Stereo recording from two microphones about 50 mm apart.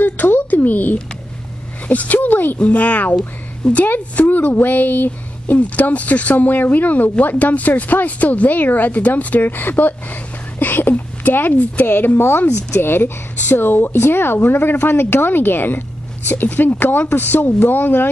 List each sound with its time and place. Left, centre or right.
0.0 s a sound: left
1.9 s a woman's voice: left
3.8 s a woman's voice: left